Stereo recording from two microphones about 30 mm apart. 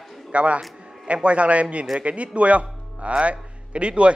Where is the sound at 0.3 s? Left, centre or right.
Right.